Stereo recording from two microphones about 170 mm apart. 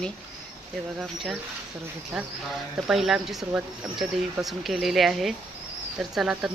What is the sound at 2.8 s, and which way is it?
Speech, centre (ahead or behind).